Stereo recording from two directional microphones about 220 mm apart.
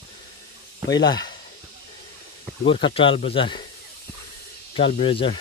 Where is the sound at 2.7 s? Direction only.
25° left (ahead or behind).